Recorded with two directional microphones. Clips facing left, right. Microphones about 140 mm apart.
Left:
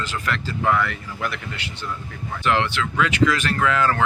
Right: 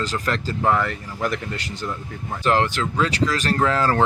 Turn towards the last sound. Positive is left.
turn(degrees=-35)  # may be behind; listen again after turning